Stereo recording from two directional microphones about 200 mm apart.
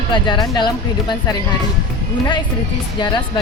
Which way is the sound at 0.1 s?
20° left (ahead or behind).